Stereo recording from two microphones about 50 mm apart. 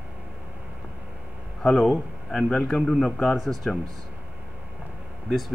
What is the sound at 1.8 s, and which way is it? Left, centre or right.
A man's voice, centre.